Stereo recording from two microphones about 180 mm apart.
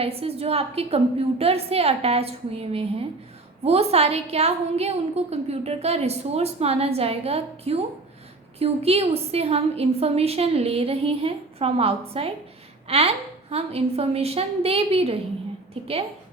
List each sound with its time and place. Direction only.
0.0 s a woman's voice: 35° right (ahead or behind)